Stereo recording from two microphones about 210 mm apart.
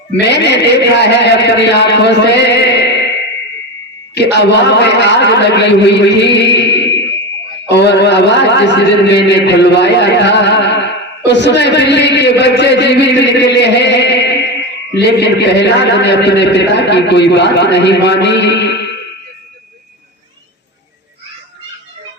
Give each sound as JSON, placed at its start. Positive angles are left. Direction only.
{"t": 0.3, "sound": "a man's voice", "side_deg": 55}